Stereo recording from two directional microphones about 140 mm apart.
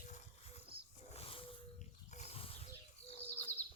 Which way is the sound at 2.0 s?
50° left (ahead or behind).